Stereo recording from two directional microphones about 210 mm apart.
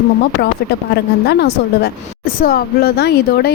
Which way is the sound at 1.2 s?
50° left (ahead or behind).